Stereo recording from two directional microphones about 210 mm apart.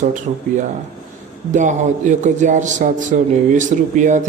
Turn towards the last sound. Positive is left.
turn(degrees=-35)  # may be behind; listen again after turning